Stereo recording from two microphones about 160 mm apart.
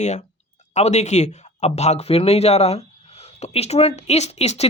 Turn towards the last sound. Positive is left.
turn(degrees=40)  # may be behind; listen again after turning